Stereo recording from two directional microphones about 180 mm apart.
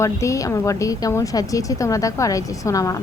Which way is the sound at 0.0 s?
15° left (ahead or behind).